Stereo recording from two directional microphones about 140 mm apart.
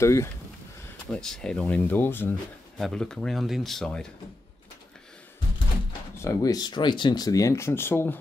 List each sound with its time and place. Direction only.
0.0 s speech: 20° left (ahead or behind)
1.1 s speech: 5° left (ahead or behind)
2.8 s speech: 5° left (ahead or behind)
6.1 s speech: 25° left (ahead or behind)